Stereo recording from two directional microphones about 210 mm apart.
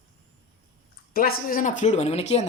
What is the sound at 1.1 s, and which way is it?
A man's voice, 45° left (ahead or behind).